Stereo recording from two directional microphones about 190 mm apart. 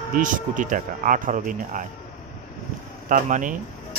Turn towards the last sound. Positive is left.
turn(degrees=-45)  # may be behind; listen again after turning